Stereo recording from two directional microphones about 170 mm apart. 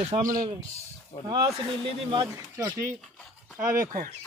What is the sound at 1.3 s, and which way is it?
Speech, 25° right (ahead or behind).